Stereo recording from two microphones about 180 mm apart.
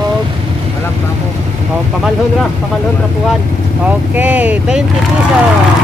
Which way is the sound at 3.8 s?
10° right (ahead or behind).